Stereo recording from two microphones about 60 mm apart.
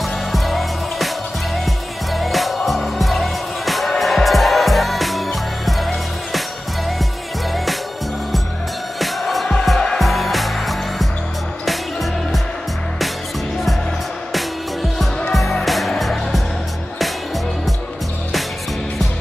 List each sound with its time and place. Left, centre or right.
0.0 s music: centre
9.0 s music: centre
14.3 s music: centre